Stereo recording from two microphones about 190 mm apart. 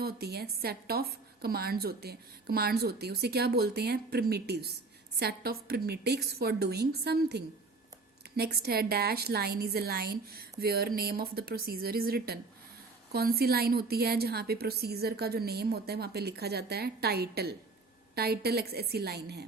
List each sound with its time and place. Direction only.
0.0 s a woman's voice: 55° right (ahead or behind)